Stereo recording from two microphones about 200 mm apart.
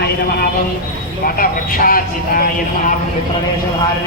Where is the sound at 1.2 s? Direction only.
45° left (ahead or behind).